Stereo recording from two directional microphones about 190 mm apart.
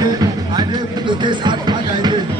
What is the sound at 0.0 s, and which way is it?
Music, 20° right (ahead or behind).